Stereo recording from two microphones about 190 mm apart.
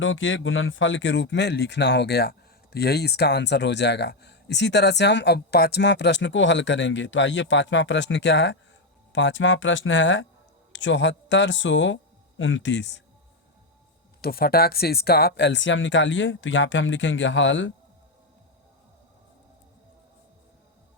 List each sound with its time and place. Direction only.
0.0 s speech: 90° left; by 8.5 s 65° left (ahead or behind)
9.1 s speech: 75° left (ahead or behind)
12.4 s speech: 90° left; by 13.0 s 70° left (ahead or behind)
14.2 s speech: 55° left (ahead or behind); by 17.7 s 75° left (ahead or behind)